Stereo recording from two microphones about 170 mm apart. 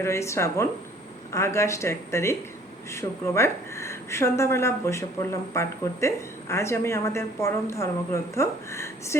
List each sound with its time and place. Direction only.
0.0 s a woman's voice: 15° left (ahead or behind)